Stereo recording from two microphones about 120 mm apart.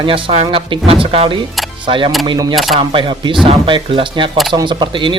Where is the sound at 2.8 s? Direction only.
45° right (ahead or behind).